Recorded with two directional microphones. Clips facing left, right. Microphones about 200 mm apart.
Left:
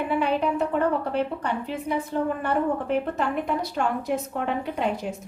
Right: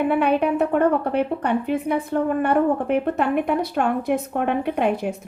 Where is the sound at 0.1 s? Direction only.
60° right (ahead or behind).